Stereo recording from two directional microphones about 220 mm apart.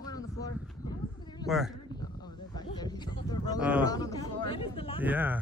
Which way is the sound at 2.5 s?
20° left (ahead or behind).